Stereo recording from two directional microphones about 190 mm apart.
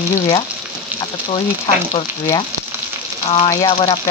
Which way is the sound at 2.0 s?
20° left (ahead or behind).